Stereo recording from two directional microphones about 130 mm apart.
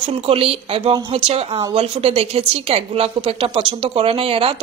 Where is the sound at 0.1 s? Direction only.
45° right (ahead or behind).